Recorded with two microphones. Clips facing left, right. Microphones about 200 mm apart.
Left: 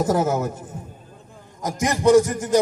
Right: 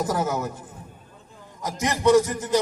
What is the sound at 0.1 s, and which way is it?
A man's voice, 45° left (ahead or behind).